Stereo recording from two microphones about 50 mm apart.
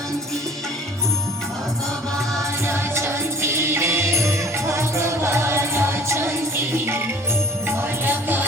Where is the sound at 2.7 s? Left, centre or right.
Right.